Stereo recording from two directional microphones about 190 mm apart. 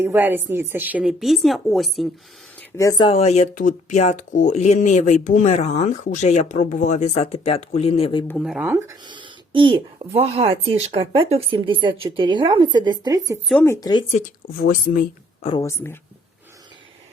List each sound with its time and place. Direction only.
0.0 s a woman's voice: 10° right (ahead or behind)
2.6 s speech: 15° left (ahead or behind)
3.1 s speech: 35° left (ahead or behind)
8.3 s speech: centre (ahead or behind)
9.0 s speech: 25° right (ahead or behind)
13.5 s speech: 10° left (ahead or behind)
13.7 s speech: 20° left (ahead or behind)
14.5 s speech: 50° left (ahead or behind)
15.6 s speech: 15° left (ahead or behind)